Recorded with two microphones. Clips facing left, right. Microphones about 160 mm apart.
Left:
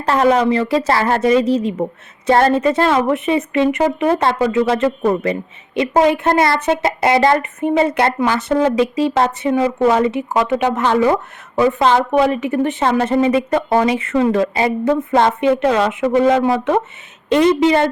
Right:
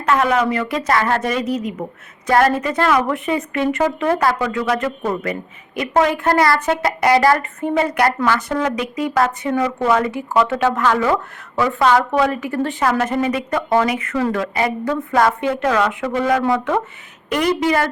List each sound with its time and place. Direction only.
0.0 s a woman's voice: 30° left (ahead or behind)